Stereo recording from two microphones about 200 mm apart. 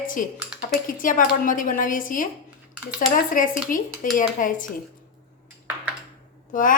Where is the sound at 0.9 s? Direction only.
40° left (ahead or behind).